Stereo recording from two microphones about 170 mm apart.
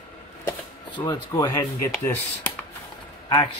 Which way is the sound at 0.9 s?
25° left (ahead or behind).